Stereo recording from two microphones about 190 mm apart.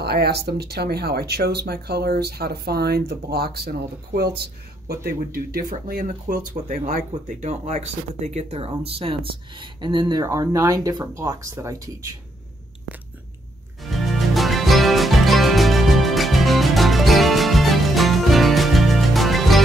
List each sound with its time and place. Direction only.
0.0 s speech: 55° right (ahead or behind)
4.8 s speech: 55° right (ahead or behind)
7.4 s speech: 35° right (ahead or behind); by 12.2 s 15° right (ahead or behind)
13.8 s music: centre (ahead or behind)